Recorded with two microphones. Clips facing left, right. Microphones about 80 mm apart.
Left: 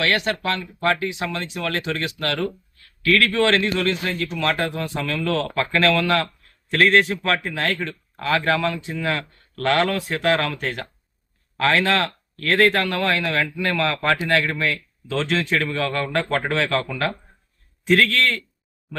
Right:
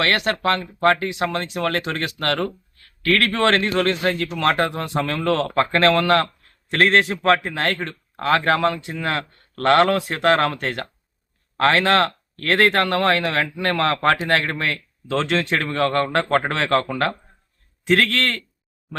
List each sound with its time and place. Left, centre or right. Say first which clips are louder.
0.2 s speech: right 3 dB; right
1.6 s speech: right 1 dB; right
6.7 s a man's voice: even; right
7.5 s speech: right 1 dB; right